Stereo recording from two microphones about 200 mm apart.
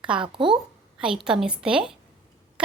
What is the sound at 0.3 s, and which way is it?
Speech, 25° right (ahead or behind).